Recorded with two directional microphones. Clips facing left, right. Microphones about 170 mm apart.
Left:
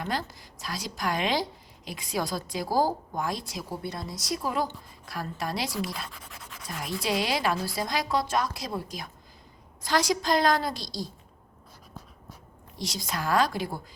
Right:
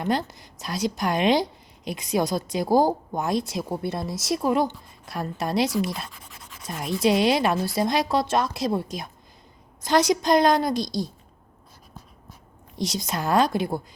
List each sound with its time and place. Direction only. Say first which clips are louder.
0.0 s a woman's voice: right 7 dB; 20° right (ahead or behind)
12.8 s a woman's voice: right 5 dB; 20° right (ahead or behind)